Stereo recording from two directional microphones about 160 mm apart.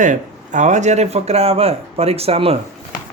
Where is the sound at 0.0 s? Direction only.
50° right (ahead or behind).